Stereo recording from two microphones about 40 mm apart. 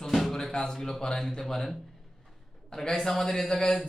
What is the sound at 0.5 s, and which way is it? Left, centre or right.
Speech, centre.